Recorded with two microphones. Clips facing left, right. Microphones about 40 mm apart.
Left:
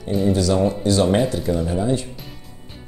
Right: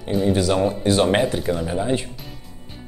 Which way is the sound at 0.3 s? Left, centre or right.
Right.